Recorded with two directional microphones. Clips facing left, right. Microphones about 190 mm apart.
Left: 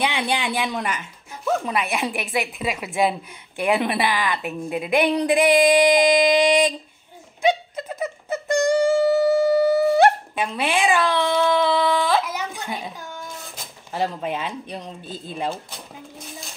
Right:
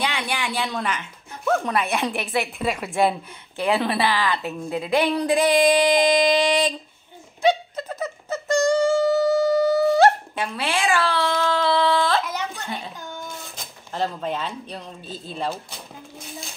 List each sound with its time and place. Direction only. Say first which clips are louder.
0.0 s speech: left 3 dB; 20° left (ahead or behind)
7.7 s a sound: left 1 dB; 10° left (ahead or behind)
13.9 s speech: left 1 dB; 10° left (ahead or behind)